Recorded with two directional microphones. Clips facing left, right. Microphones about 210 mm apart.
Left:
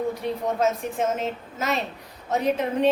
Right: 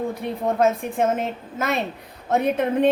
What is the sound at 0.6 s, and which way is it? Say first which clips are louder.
A woman's voice: right 5 dB; 55° right (ahead or behind).